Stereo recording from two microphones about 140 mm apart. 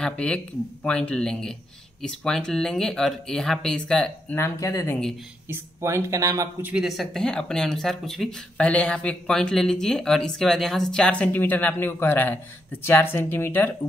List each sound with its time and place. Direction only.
0.0 s speech: 5° left (ahead or behind)
4.4 s speech: 20° left (ahead or behind)
5.5 s speech: 20° right (ahead or behind)
6.6 s speech: 5° right (ahead or behind); by 13.7 s 15° left (ahead or behind)